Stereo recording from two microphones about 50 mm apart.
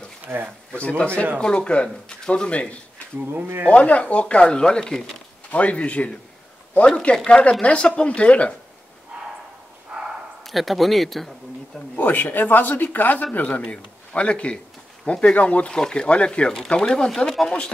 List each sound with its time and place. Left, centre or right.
0.2 s a sound: right
0.7 s speech: left
5.5 s speech: left
7.2 s speech: centre
9.1 s bow-wow: right
9.9 s a sound: centre
10.4 s speech: centre
11.9 s speech: left
13.6 s a man's voice: left